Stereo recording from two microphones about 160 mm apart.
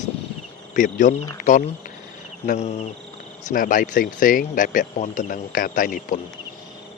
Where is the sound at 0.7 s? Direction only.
55° left (ahead or behind).